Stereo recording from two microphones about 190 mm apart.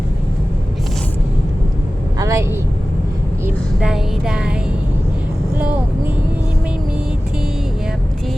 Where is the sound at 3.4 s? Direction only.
5° right (ahead or behind).